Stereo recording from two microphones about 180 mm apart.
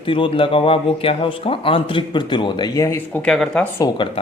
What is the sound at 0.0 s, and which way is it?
Speech, 30° left (ahead or behind).